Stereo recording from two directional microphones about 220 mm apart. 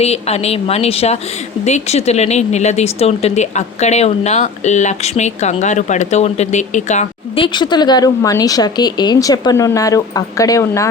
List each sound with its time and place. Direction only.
0.0 s speech: 30° left (ahead or behind)